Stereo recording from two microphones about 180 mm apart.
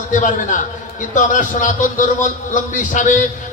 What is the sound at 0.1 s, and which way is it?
A man's voice, 45° left (ahead or behind).